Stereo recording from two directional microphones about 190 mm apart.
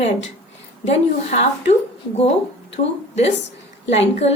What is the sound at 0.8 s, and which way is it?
A woman's voice, 35° left (ahead or behind).